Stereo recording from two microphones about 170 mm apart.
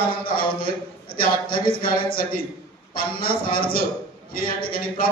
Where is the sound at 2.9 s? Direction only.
60° left (ahead or behind).